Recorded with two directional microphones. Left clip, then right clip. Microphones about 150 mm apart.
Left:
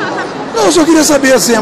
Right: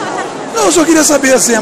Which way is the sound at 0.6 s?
15° right (ahead or behind).